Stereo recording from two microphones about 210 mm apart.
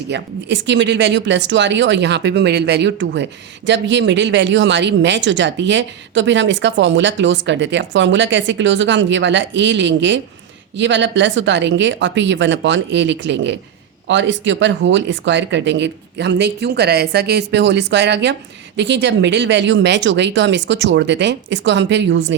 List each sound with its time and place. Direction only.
0.1 s speech: 60° right (ahead or behind)